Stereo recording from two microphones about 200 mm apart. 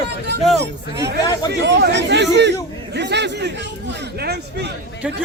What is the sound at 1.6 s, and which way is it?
Speech, 60° right (ahead or behind).